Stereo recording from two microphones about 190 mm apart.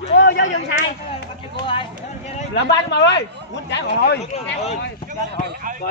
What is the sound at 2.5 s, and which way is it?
Speech, 65° left (ahead or behind).